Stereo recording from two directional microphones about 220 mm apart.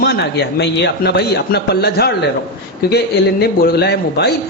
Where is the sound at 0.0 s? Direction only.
50° left (ahead or behind).